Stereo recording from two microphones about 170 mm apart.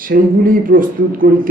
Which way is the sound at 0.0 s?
55° right (ahead or behind).